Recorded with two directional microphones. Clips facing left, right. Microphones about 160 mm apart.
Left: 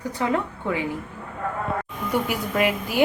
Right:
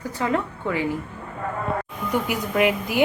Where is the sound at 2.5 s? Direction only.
15° right (ahead or behind).